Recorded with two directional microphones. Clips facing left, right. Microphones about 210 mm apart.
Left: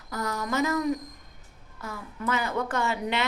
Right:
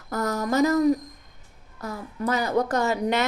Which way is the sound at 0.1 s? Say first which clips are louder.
Right 5 dB; 45° right (ahead or behind).